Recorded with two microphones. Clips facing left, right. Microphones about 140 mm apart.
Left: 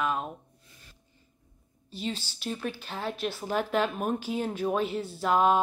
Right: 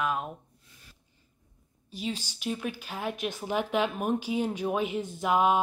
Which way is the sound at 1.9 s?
10° right (ahead or behind).